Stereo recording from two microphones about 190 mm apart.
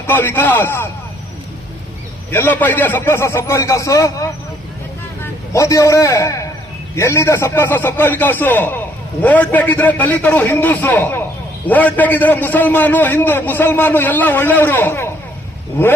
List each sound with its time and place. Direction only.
0.1 s a man's voice: 10° left (ahead or behind)
2.3 s a man's voice: 10° left (ahead or behind)